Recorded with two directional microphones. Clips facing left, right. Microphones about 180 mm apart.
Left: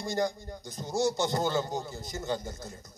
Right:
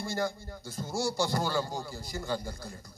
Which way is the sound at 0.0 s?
20° left (ahead or behind).